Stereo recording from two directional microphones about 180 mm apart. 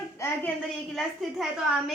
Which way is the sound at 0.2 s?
15° left (ahead or behind).